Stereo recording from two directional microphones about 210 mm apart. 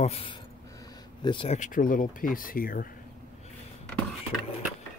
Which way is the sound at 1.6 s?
40° left (ahead or behind).